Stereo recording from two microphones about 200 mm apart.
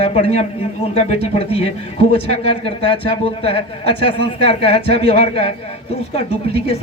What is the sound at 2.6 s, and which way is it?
A man's voice, 25° left (ahead or behind).